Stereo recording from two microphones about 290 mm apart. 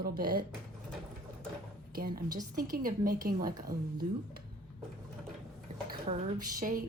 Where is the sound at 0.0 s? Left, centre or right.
Right.